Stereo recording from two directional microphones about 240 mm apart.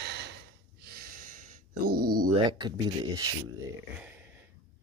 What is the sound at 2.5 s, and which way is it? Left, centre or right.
Speech, centre.